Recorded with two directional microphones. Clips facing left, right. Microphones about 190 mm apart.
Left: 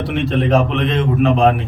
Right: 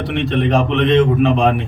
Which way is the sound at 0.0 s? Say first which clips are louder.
Even; centre (ahead or behind).